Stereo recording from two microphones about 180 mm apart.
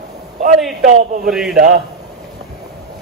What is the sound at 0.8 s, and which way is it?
Speech, 45° right (ahead or behind).